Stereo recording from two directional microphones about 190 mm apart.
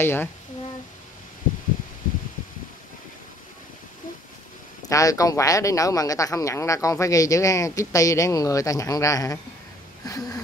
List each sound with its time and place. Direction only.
0.0 s speech: 10° left (ahead or behind)
4.8 s speech: 15° left (ahead or behind)
10.0 s a sound: 20° left (ahead or behind)